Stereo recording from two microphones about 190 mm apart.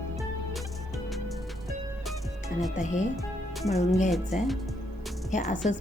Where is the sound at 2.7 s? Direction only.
40° left (ahead or behind).